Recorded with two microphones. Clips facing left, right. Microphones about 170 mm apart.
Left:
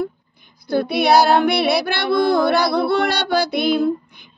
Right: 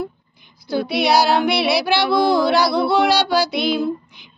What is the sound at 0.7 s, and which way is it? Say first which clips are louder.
Music: left 2 dB; 55° left (ahead or behind).